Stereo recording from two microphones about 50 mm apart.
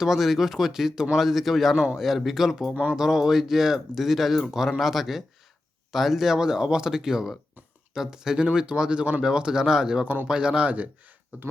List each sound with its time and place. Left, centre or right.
0.0 s speech: centre
1.7 s speech: centre
2.0 s speech: centre; by 10.8 s right
11.3 s speech: right